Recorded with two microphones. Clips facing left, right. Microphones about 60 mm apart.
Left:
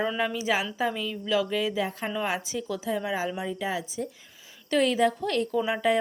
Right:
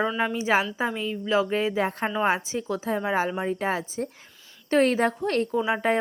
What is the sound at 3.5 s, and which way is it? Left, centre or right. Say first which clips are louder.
A woman's voice: right 4 dB; right.